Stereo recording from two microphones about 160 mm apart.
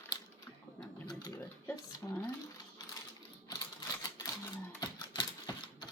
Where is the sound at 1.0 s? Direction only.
25° left (ahead or behind).